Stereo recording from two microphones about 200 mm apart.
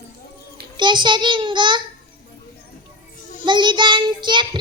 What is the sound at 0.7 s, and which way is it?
Child singing, 25° right (ahead or behind).